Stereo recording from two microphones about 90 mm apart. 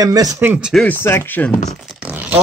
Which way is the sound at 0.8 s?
25° left (ahead or behind).